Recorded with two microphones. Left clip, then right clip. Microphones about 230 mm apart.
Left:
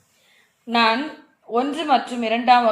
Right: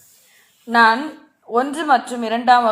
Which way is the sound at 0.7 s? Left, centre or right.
Right.